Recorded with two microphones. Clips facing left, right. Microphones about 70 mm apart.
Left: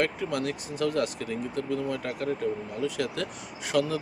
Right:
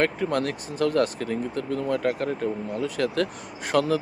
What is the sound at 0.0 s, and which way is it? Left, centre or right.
Speech, right.